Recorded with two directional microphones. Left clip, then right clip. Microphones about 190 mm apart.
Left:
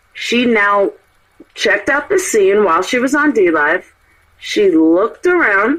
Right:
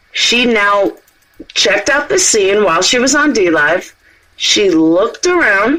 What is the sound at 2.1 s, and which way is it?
Speech, 50° right (ahead or behind).